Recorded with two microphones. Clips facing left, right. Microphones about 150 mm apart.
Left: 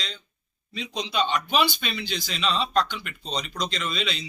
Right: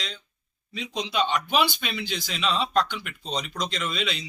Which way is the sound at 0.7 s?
5° right (ahead or behind).